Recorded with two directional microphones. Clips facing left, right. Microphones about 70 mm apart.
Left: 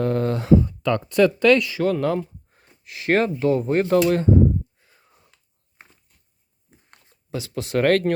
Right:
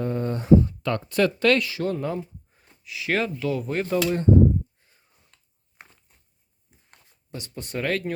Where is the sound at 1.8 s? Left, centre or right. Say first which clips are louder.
Left 6 dB; left.